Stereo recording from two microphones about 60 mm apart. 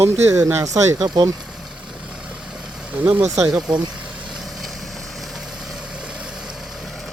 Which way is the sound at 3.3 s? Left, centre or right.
Centre.